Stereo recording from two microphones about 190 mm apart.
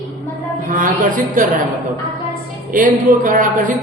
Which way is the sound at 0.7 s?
45° right (ahead or behind).